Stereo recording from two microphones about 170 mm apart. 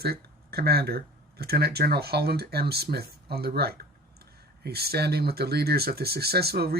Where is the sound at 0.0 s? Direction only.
70° right (ahead or behind).